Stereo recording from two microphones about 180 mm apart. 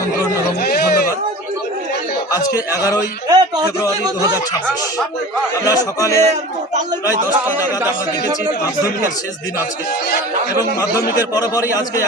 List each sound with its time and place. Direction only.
0.6 s a sound: 55° left (ahead or behind)
2.7 s a man's voice: 20° left (ahead or behind)
3.2 s a man's voice: 20° right (ahead or behind)
5.6 s speech: 20° left (ahead or behind)
11.3 s a man's voice: 20° left (ahead or behind)